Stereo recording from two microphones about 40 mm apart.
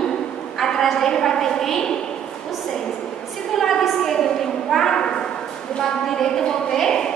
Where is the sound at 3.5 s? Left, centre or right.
Centre.